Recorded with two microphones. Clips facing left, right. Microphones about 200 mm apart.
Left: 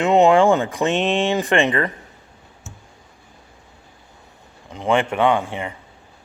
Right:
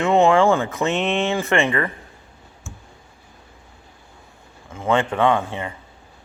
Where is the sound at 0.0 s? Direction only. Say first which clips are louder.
Left 2 dB; 20° left (ahead or behind).